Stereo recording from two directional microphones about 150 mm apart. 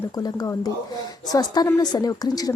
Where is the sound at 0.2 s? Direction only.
25° left (ahead or behind).